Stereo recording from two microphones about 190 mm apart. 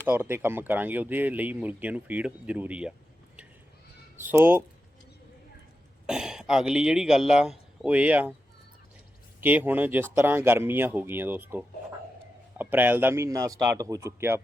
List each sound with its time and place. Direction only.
0.0 s speech: 10° right (ahead or behind)
4.2 s speech: 10° right (ahead or behind)
6.1 s speech: 5° right (ahead or behind)
9.4 s speech: 10° right (ahead or behind)